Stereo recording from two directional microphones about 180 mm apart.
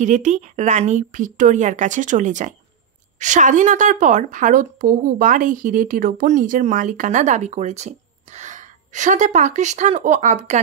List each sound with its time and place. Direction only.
0.0 s a woman's voice: 45° right (ahead or behind)